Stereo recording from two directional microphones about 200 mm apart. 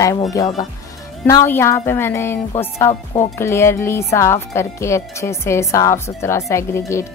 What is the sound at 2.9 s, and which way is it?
Speech, 25° left (ahead or behind).